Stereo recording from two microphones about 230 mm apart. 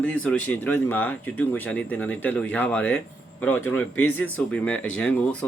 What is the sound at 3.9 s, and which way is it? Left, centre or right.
Speech, left.